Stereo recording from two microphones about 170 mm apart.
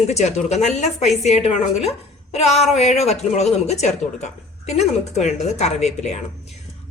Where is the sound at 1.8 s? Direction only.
40° left (ahead or behind).